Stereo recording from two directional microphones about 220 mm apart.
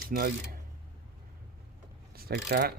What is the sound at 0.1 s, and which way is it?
Speech, 45° right (ahead or behind).